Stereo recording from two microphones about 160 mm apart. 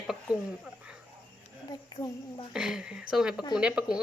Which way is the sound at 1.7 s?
25° left (ahead or behind).